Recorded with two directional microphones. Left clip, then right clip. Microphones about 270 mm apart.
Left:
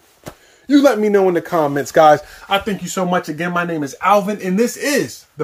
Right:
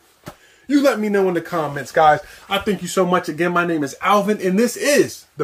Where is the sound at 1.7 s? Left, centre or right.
Left.